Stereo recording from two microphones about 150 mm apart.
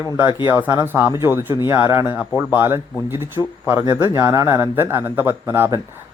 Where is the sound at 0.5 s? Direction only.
15° right (ahead or behind).